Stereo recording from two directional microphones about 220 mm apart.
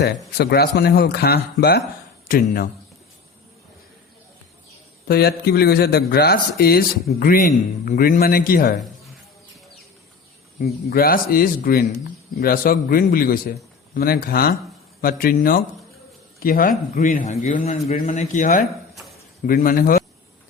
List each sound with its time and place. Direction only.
0.3 s speech: 45° left (ahead or behind)
5.0 s speech: 45° left (ahead or behind)
10.6 s a man's voice: 45° left (ahead or behind)